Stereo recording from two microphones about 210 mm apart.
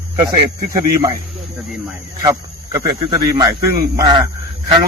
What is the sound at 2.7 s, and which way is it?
Speech, 20° right (ahead or behind).